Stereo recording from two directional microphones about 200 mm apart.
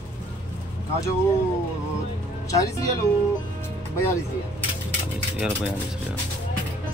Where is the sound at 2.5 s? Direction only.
15° left (ahead or behind).